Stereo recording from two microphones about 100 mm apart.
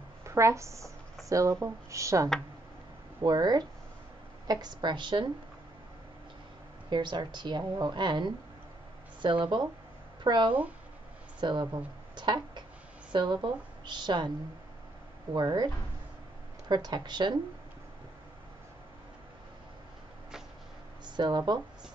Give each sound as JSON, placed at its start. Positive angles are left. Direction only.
{"t": 0.2, "sound": "speech", "side_deg": -30}
{"t": 3.3, "sound": "speech", "side_deg": -45}
{"t": 6.9, "sound": "speech", "side_deg": -45}
{"t": 15.3, "sound": "speech", "side_deg": -45}
{"t": 21.0, "sound": "speech", "side_deg": -50}